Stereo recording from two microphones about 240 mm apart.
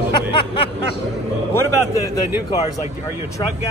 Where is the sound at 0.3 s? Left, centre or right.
Left.